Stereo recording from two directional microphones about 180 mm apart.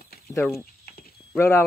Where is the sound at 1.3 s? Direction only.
15° left (ahead or behind).